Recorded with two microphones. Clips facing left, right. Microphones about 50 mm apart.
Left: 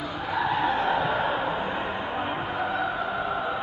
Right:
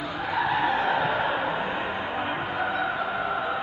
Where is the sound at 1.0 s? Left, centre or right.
Centre.